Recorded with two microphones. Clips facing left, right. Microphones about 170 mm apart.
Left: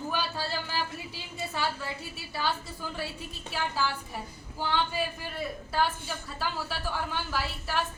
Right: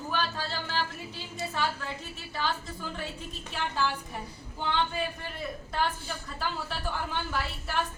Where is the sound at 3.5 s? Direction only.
5° left (ahead or behind).